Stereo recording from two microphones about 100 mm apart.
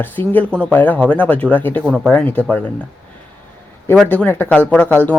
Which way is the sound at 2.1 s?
15° left (ahead or behind).